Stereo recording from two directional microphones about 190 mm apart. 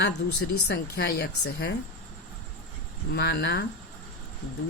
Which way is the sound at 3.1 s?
60° left (ahead or behind).